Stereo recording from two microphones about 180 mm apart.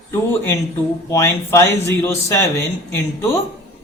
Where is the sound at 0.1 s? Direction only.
10° left (ahead or behind).